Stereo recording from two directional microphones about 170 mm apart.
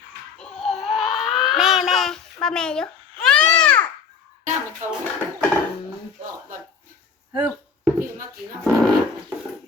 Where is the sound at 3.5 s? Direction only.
5° left (ahead or behind).